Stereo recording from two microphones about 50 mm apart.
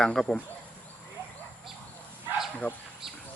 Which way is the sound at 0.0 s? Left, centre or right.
Centre.